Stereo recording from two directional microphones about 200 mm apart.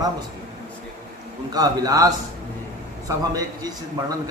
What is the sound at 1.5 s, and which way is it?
Speech, 20° right (ahead or behind).